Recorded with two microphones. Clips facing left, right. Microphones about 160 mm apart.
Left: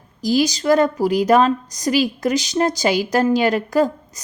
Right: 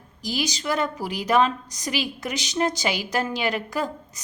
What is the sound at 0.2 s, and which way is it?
A woman's voice, 40° left (ahead or behind).